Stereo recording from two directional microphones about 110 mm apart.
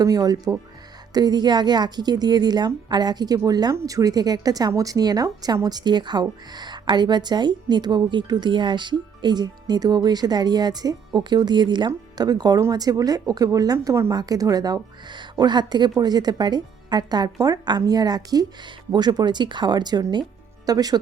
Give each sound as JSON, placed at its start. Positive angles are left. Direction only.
{"t": 0.0, "sound": "speech", "side_deg": -35}
{"t": 13.7, "sound": "speech", "side_deg": -25}